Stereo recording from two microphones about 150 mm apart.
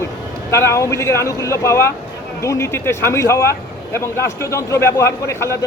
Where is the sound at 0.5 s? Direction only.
20° left (ahead or behind).